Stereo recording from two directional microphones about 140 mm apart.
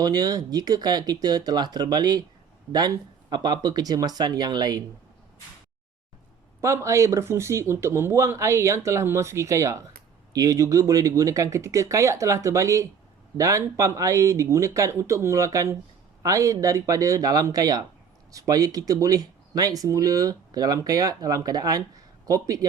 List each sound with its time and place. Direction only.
0.0 s speech: 30° right (ahead or behind)
6.6 s speech: 20° right (ahead or behind)